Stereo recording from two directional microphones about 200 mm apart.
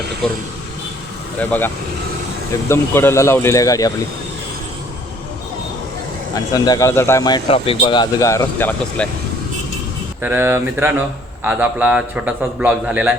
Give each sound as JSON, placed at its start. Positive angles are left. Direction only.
{"t": 0.2, "sound": "speech", "side_deg": 0}
{"t": 6.3, "sound": "speech", "side_deg": 20}
{"t": 10.2, "sound": "a man's voice", "side_deg": -10}